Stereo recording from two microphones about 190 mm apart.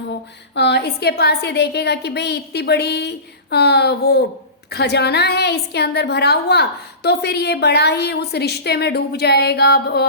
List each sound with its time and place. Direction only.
0.5 s a woman's voice: 65° left (ahead or behind)